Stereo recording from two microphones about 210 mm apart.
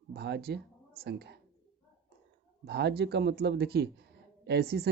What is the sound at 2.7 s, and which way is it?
Speech, 50° right (ahead or behind).